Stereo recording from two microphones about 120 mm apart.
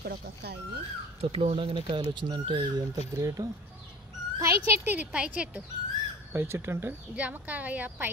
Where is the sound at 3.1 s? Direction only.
30° right (ahead or behind).